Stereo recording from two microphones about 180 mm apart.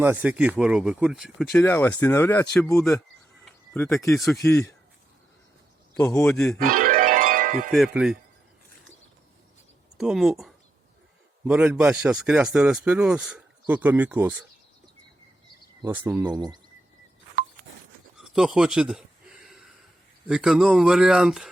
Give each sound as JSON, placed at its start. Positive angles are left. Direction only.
{"t": 0.0, "sound": "speech", "side_deg": -10}
{"t": 1.5, "sound": "speech", "side_deg": 10}
{"t": 4.2, "sound": "speech", "side_deg": 0}
{"t": 4.4, "sound": "speech", "side_deg": 15}
{"t": 6.0, "sound": "speech", "side_deg": 10}
{"t": 6.6, "sound": "music", "side_deg": -45}
{"t": 7.7, "sound": "speech", "side_deg": 0}
{"t": 10.0, "sound": "speech", "side_deg": -5}
{"t": 16.0, "sound": "speech", "side_deg": -15}
{"t": 18.2, "sound": "a sound", "side_deg": 0}
{"t": 20.2, "sound": "speech", "side_deg": -5}